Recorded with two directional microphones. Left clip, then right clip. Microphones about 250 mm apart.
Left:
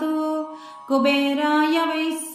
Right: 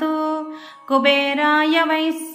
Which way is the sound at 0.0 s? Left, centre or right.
Centre.